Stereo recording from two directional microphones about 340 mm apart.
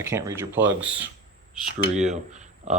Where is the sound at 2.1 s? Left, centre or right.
Centre.